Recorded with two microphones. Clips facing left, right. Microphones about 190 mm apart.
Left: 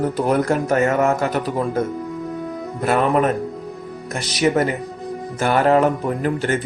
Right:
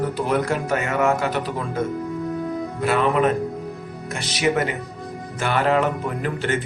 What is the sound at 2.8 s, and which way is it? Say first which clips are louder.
Speech: left 2 dB; 45° left (ahead or behind).